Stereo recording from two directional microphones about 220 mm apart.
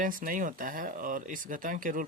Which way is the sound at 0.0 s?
40° right (ahead or behind).